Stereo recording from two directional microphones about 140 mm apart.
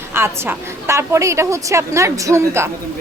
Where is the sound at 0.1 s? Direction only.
15° right (ahead or behind).